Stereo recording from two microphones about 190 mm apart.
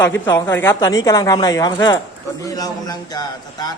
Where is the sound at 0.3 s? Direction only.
15° left (ahead or behind).